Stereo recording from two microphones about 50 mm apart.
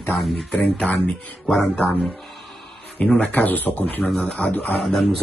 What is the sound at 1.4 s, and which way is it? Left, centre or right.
Speech, centre.